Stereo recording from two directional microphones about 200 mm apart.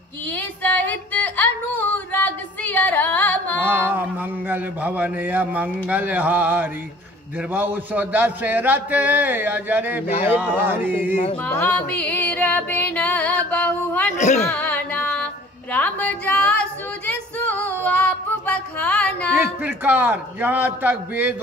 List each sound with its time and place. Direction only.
0.6 s yodeling: 10° left (ahead or behind)
3.6 s a sound: 10° right (ahead or behind)
7.5 s a man's voice: 10° right (ahead or behind)
11.4 s music: 10° left (ahead or behind)
14.1 s a woman's voice: 35° left (ahead or behind)
14.6 s carnatic music: 5° left (ahead or behind)
15.7 s a sound: 5° left (ahead or behind)
19.4 s a man's voice: 10° right (ahead or behind)